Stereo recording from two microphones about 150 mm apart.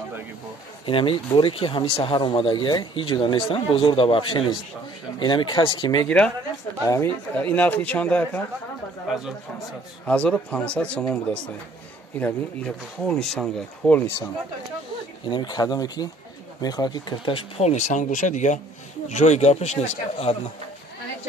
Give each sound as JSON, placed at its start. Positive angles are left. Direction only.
{"t": 0.8, "sound": "speech", "side_deg": 35}
{"t": 6.0, "sound": "speech", "side_deg": 10}
{"t": 6.8, "sound": "speech", "side_deg": 20}
{"t": 10.0, "sound": "speech", "side_deg": 5}
{"t": 15.2, "sound": "speech", "side_deg": 30}